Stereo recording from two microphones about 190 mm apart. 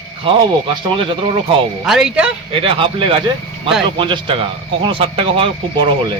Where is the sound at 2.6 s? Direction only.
30° right (ahead or behind).